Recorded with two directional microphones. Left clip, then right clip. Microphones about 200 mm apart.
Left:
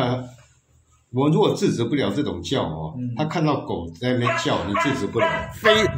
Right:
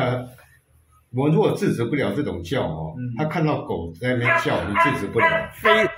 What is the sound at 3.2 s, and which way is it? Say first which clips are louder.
Speech: even; 15° left (ahead or behind).